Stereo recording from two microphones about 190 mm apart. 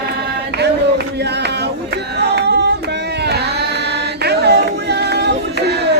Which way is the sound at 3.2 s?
60° right (ahead or behind).